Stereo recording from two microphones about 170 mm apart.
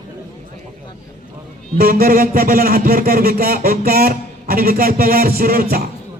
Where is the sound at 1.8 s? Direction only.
60° right (ahead or behind).